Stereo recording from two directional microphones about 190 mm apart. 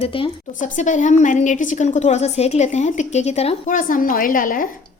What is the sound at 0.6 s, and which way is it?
A woman's voice, 40° left (ahead or behind).